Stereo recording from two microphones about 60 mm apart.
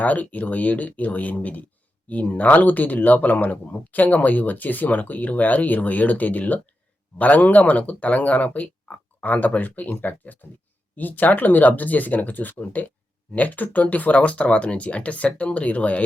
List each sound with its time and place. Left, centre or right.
0.0 s speech: left